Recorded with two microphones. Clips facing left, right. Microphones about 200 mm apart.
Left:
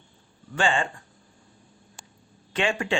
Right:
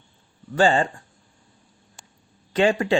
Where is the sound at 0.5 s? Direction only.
40° right (ahead or behind).